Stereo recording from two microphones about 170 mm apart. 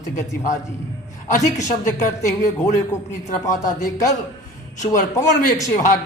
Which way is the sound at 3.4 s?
20° left (ahead or behind).